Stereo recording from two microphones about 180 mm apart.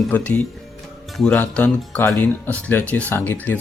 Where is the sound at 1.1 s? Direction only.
5° left (ahead or behind).